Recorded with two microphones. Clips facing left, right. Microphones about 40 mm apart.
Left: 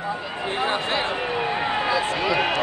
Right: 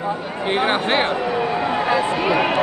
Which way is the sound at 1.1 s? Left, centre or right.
Left.